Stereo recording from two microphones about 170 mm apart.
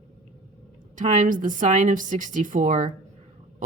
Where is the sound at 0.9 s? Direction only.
50° right (ahead or behind).